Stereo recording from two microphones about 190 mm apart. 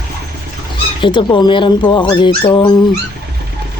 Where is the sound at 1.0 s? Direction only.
25° left (ahead or behind).